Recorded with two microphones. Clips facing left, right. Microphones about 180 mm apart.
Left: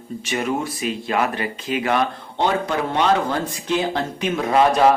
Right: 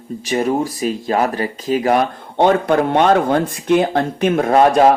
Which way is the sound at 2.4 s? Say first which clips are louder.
Right 7 dB; 55° right (ahead or behind).